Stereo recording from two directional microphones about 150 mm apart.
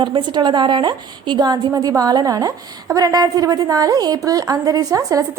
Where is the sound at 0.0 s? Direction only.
30° right (ahead or behind).